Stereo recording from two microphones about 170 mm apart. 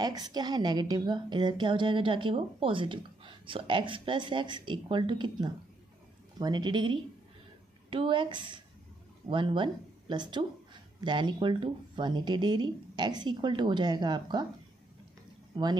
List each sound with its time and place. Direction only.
0.0 s a woman's voice: 25° right (ahead or behind)
15.5 s speech: 25° right (ahead or behind)